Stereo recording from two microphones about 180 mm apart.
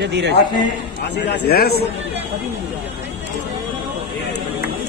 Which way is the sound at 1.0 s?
70° left (ahead or behind).